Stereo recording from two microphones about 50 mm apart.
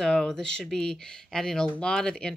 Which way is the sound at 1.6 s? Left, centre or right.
Centre.